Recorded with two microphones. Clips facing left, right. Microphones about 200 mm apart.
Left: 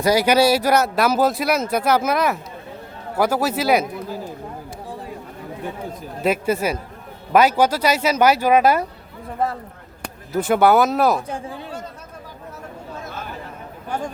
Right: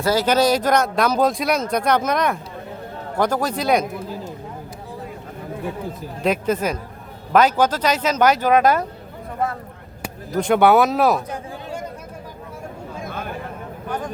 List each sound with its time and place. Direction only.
0.0 s speech: 15° left (ahead or behind)
6.2 s speech: 5° left (ahead or behind)
10.3 s speech: 5° left (ahead or behind)
13.1 s a sound: 55° right (ahead or behind)